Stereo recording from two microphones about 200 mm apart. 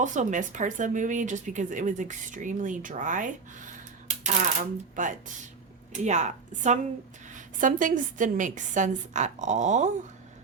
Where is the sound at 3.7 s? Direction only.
35° right (ahead or behind).